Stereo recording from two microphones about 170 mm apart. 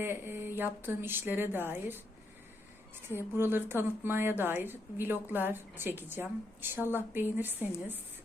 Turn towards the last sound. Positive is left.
turn(degrees=-10)  # may be behind; listen again after turning